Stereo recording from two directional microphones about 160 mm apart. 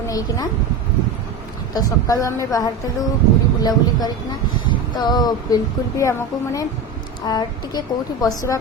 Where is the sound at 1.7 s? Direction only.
25° left (ahead or behind).